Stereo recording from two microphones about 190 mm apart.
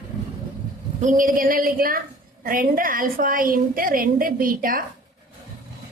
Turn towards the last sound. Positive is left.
turn(degrees=-50)  # may be behind; listen again after turning